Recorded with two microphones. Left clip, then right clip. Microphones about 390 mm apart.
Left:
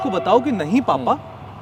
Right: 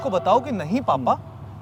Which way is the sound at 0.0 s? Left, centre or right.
Right.